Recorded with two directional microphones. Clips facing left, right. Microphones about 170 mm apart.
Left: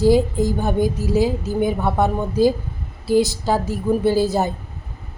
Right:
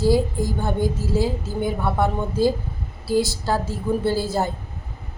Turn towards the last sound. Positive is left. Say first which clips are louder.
# left 4 dB
turn(degrees=20)  # may be behind; listen again after turning